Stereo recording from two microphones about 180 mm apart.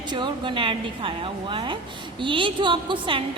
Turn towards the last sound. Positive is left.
turn(degrees=-30)  # may be behind; listen again after turning